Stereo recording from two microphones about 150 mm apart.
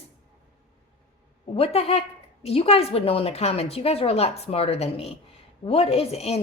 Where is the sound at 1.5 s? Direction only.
40° left (ahead or behind).